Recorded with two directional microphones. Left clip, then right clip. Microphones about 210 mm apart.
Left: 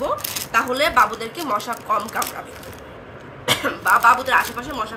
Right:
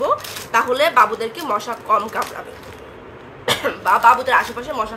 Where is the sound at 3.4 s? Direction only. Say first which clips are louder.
Right 1 dB; 40° right (ahead or behind).